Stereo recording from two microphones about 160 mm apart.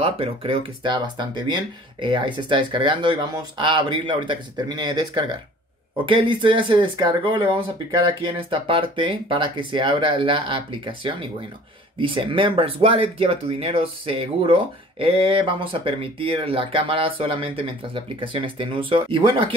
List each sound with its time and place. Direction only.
0.0 s speech: 35° right (ahead or behind)